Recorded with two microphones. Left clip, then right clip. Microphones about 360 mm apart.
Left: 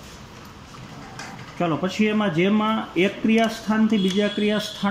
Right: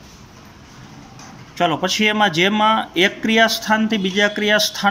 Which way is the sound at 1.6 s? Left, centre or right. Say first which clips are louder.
Right 6 dB; right.